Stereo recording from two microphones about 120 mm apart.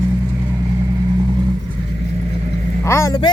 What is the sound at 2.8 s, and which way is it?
Speech, 20° left (ahead or behind).